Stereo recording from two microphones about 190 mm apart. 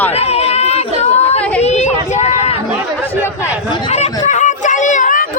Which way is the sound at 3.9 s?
35° left (ahead or behind).